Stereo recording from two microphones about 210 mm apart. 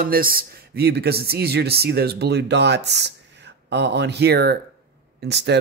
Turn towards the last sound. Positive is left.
turn(degrees=-55)  # may be behind; listen again after turning